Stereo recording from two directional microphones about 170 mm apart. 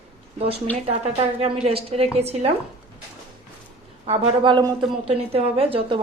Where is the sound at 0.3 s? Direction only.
35° right (ahead or behind).